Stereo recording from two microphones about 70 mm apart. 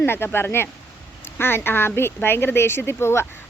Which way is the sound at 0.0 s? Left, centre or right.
Left.